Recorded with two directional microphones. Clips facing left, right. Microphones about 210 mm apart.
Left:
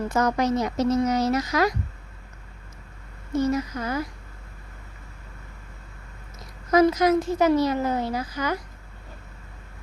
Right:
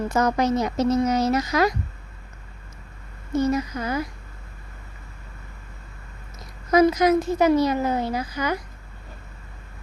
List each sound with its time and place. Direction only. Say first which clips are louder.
0.1 s speech: right 1 dB; 20° right (ahead or behind)
3.3 s a woman's voice: right 1 dB; 20° right (ahead or behind)
6.7 s a woman's voice: right 1 dB; 15° right (ahead or behind)